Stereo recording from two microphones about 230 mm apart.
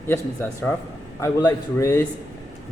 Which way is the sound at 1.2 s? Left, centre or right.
Centre.